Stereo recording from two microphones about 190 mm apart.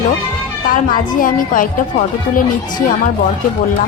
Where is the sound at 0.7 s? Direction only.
45° left (ahead or behind).